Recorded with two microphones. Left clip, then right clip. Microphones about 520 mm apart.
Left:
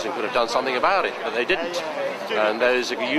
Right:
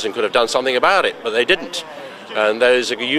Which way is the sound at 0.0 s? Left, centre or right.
Right.